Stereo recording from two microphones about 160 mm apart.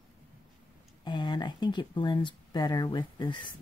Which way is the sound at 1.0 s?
30° left (ahead or behind).